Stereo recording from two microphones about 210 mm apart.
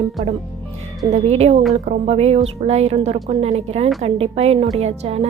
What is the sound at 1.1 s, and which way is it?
A woman's voice, 30° right (ahead or behind).